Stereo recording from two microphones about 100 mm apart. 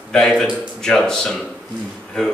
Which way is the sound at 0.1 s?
5° left (ahead or behind).